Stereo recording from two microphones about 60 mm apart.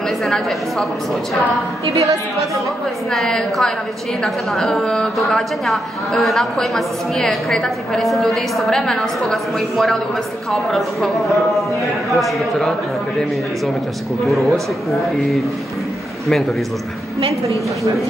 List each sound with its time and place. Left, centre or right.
0.2 s a woman's voice: centre
1.9 s a woman's voice: right
3.1 s a woman's voice: centre
14.2 s a woman's voice: centre